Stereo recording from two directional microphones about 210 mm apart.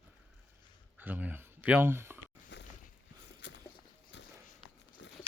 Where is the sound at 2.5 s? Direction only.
55° left (ahead or behind).